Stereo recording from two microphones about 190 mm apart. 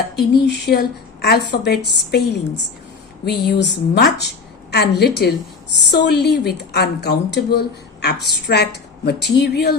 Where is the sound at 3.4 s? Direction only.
60° left (ahead or behind).